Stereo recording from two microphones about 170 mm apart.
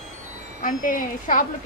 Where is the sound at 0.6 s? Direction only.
50° left (ahead or behind).